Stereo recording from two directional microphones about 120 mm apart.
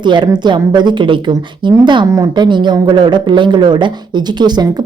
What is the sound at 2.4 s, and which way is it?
Speech, 40° right (ahead or behind).